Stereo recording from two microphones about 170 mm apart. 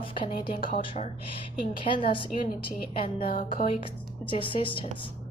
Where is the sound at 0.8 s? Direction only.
40° left (ahead or behind).